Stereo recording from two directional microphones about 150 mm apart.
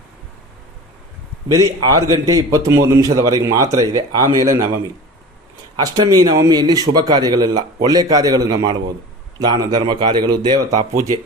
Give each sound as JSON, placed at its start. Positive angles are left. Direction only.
{"t": 1.5, "sound": "a man's voice", "side_deg": -20}
{"t": 5.7, "sound": "a man's voice", "side_deg": -25}